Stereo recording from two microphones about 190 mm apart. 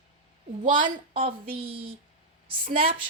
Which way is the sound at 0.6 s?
40° right (ahead or behind).